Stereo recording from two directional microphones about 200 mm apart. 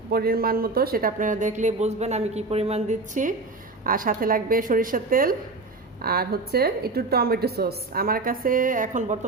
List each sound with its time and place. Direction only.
0.1 s a woman's voice: 50° right (ahead or behind)